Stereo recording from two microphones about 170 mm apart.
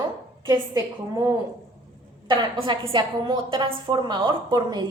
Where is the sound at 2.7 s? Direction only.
30° right (ahead or behind).